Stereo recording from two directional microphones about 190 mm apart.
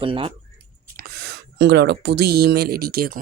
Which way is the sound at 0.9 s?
55° right (ahead or behind).